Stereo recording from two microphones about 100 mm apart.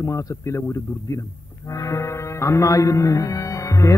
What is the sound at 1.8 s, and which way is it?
Speech, 30° left (ahead or behind).